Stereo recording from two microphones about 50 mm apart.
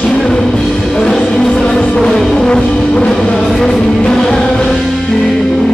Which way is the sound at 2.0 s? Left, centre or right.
Centre.